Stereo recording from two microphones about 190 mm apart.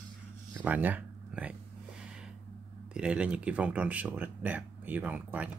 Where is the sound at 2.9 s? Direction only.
5° right (ahead or behind).